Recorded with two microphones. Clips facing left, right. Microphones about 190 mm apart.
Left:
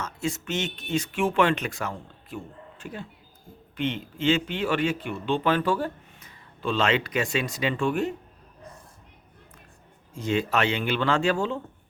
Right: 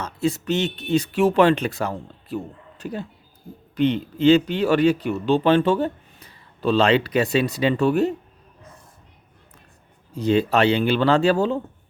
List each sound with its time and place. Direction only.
0.0 s speech: 35° right (ahead or behind)
10.2 s speech: 35° right (ahead or behind)